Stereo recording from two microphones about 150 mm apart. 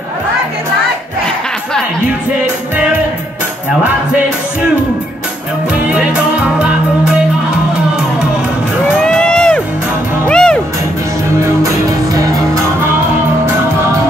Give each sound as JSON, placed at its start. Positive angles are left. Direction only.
{"t": 5.9, "sound": "music", "side_deg": -5}
{"t": 8.9, "sound": "a sound", "side_deg": 5}
{"t": 10.2, "sound": "music", "side_deg": 5}
{"t": 11.4, "sound": "music", "side_deg": -20}